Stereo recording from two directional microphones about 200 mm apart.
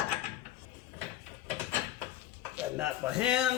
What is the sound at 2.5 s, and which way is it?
Speech, 5° right (ahead or behind).